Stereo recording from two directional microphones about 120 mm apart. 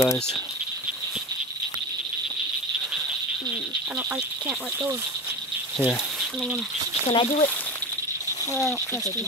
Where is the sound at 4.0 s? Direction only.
10° right (ahead or behind).